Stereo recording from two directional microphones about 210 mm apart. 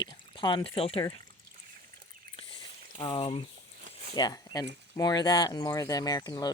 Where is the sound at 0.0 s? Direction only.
20° left (ahead or behind).